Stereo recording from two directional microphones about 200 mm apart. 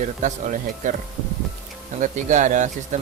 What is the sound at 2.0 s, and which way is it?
Speech, 40° right (ahead or behind).